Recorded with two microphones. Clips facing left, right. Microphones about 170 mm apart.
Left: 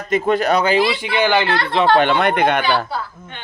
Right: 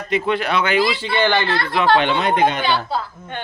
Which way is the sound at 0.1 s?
45° left (ahead or behind).